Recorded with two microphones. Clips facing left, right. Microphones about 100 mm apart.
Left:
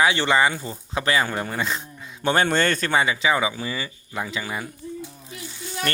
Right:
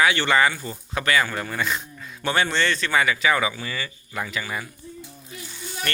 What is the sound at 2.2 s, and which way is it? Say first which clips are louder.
Speech: left 3 dB; 40° left (ahead or behind).